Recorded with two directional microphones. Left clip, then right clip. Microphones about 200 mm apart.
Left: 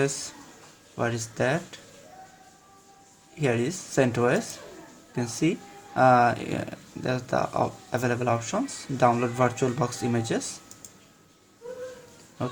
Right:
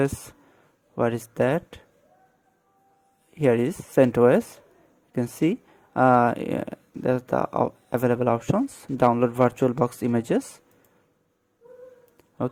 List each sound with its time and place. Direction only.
0.9 s speech: 50° right (ahead or behind)
3.4 s speech: 50° right (ahead or behind)